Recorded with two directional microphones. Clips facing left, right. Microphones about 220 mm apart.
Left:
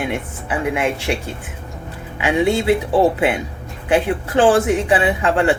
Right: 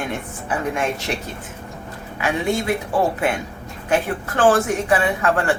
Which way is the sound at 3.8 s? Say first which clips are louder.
Left 4 dB; 15° left (ahead or behind).